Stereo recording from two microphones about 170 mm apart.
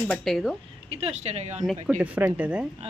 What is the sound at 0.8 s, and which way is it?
Speech, 35° right (ahead or behind).